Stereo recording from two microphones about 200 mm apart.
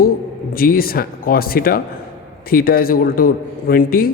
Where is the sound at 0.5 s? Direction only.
45° left (ahead or behind).